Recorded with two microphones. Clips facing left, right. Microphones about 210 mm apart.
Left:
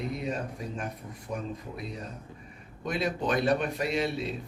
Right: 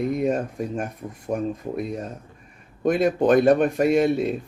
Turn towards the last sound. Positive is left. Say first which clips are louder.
# right 10 dB
turn(degrees=-50)  # may be behind; listen again after turning